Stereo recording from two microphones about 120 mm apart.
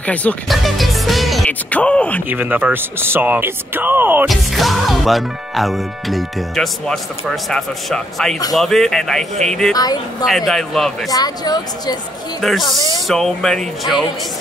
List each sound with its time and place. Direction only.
0.0 s speech: 10° left (ahead or behind)
0.5 s music: centre (ahead or behind)
1.5 s music: 10° left (ahead or behind)
2.2 s speech: 15° right (ahead or behind)
4.3 s speech: centre (ahead or behind)
11.1 s speech: 35° left (ahead or behind)
12.4 s speech: centre (ahead or behind)